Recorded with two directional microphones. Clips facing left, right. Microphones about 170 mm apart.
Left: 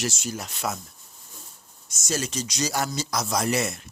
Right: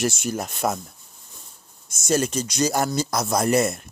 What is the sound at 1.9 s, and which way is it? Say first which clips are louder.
Speech: right 7 dB; 55° right (ahead or behind).